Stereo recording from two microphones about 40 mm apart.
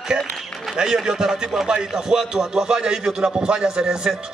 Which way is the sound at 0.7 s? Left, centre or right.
Centre.